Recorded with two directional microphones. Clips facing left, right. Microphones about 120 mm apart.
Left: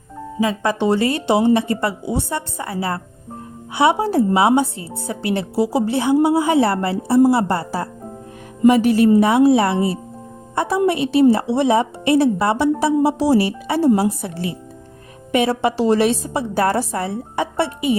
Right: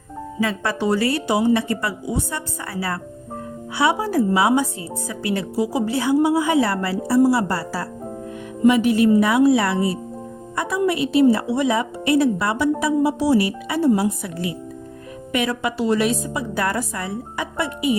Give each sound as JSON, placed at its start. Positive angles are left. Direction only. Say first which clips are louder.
{"t": 0.3, "sound": "a woman's voice", "louder": "left 4 dB", "side_deg": 15}
{"t": 8.6, "sound": "a woman's voice", "louder": "left 3 dB", "side_deg": 35}
{"t": 9.2, "sound": "a woman's voice", "louder": "left 3 dB", "side_deg": 25}